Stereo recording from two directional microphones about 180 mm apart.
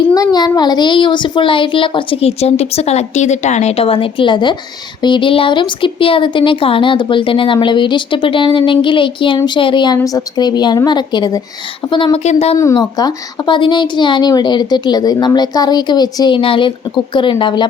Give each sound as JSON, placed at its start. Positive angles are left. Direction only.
{"t": 0.1, "sound": "speech", "side_deg": 20}
{"t": 12.5, "sound": "speech", "side_deg": 20}